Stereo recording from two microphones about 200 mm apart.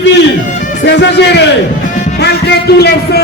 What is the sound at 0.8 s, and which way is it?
A man's voice, 60° left (ahead or behind).